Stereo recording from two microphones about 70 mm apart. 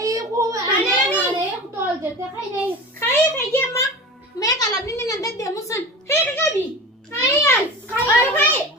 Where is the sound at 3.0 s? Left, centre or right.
Left.